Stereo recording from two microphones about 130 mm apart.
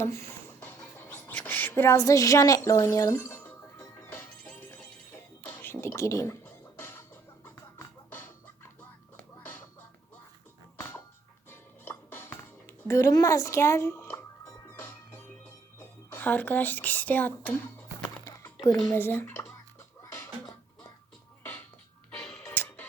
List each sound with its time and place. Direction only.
0.0 s a sound: 20° left (ahead or behind)
4.1 s music: 15° left (ahead or behind)
10.8 s a sound: 20° left (ahead or behind)
11.9 s music: 15° left (ahead or behind)
15.8 s speech: 15° left (ahead or behind)
18.3 s a sound: 25° left (ahead or behind)
18.6 s speech: 20° left (ahead or behind)
20.0 s music: 20° left (ahead or behind)
22.1 s music: 5° left (ahead or behind)
22.5 s music: 15° left (ahead or behind)